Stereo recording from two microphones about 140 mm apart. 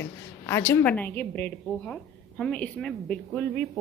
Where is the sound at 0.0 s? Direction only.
20° left (ahead or behind).